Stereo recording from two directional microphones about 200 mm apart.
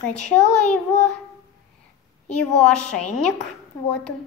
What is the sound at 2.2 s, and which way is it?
Speech, 5° left (ahead or behind).